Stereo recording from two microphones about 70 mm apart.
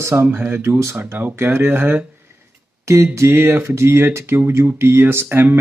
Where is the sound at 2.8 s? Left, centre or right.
Right.